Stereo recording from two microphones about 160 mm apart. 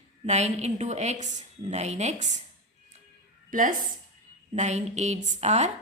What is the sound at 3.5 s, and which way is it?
A woman's voice, 55° right (ahead or behind).